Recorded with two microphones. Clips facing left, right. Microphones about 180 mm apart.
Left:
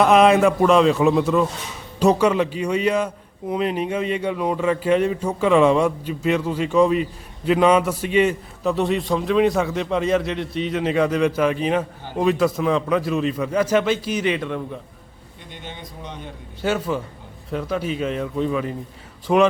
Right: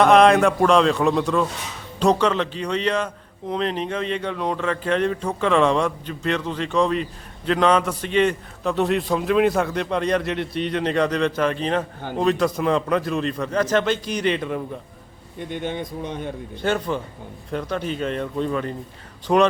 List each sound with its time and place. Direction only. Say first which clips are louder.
0.0 s a man's voice: even; 5° left (ahead or behind)
15.4 s speech: right 9 dB; 55° right (ahead or behind)
16.6 s a man's voice: left 1 dB; 5° left (ahead or behind)